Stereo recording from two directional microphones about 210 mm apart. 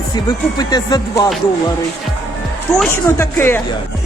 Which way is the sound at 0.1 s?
20° left (ahead or behind).